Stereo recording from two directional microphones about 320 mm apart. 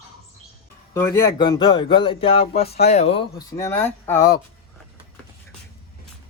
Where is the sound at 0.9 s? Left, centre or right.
Centre.